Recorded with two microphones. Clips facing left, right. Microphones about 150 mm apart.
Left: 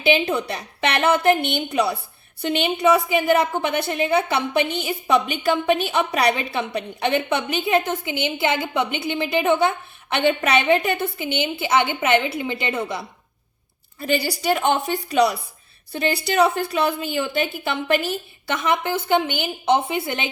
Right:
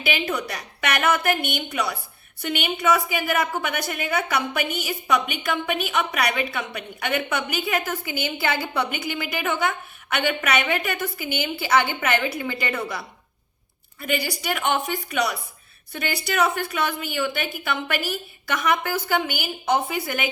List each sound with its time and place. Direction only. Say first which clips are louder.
0.0 s a woman's voice: left 6 dB; 25° left (ahead or behind)